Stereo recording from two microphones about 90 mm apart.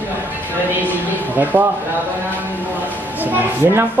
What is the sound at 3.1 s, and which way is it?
Speech, 20° right (ahead or behind).